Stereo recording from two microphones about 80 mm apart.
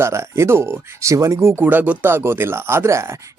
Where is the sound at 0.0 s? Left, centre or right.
Right.